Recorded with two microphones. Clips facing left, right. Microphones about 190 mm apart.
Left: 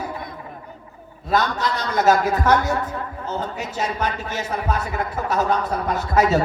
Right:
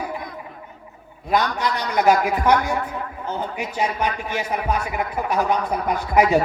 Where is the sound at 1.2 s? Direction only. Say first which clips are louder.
Even; 15° right (ahead or behind).